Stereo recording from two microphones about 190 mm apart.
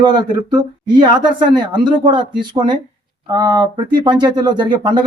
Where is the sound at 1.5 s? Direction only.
25° right (ahead or behind).